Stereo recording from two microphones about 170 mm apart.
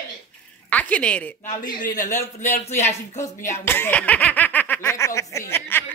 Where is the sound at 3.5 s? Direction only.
15° left (ahead or behind).